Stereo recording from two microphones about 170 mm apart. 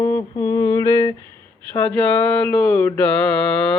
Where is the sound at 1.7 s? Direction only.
10° left (ahead or behind).